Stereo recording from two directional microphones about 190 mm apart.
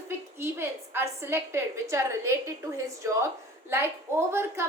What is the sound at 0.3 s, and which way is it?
A woman's voice, 10° right (ahead or behind).